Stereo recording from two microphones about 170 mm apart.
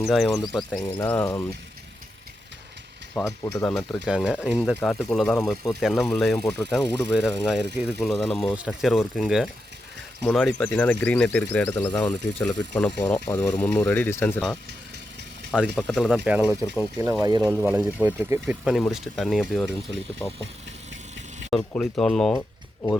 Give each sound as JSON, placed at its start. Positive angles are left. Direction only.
{"t": 0.0, "sound": "speech", "side_deg": 0}
{"t": 1.0, "sound": "speech", "side_deg": 15}
{"t": 3.4, "sound": "speech", "side_deg": 15}
{"t": 3.8, "sound": "speech", "side_deg": 0}
{"t": 15.5, "sound": "speech", "side_deg": -5}
{"t": 17.4, "sound": "speech", "side_deg": -15}
{"t": 21.6, "sound": "speech", "side_deg": 15}
{"t": 21.9, "sound": "speech", "side_deg": 5}
{"t": 22.3, "sound": "a sound", "side_deg": 15}